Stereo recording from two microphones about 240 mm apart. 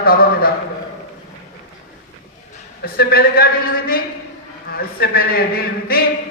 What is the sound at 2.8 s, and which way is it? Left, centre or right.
A man's voice, left.